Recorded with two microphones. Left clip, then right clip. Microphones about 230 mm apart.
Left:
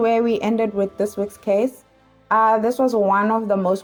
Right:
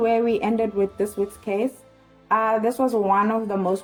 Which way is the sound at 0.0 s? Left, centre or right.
Left.